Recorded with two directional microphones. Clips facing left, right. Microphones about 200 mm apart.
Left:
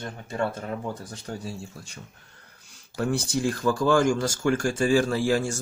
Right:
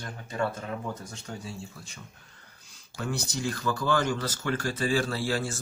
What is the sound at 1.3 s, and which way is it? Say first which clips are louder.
Speech: left 5 dB; 45° left (ahead or behind).